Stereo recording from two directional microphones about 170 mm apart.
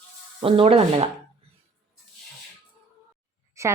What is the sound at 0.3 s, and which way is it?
Speech, 35° right (ahead or behind).